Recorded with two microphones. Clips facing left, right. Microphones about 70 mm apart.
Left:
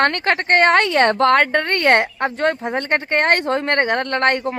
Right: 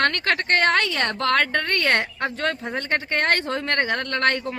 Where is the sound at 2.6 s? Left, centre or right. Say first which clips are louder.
Left 5 dB; left.